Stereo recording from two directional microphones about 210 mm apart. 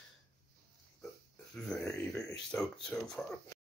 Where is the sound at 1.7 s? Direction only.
5° left (ahead or behind).